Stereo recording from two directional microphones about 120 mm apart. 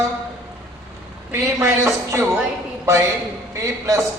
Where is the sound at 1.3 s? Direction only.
25° right (ahead or behind).